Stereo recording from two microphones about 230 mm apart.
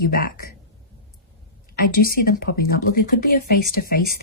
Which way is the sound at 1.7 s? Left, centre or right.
Left.